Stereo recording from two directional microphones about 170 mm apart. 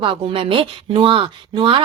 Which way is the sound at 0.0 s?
30° right (ahead or behind).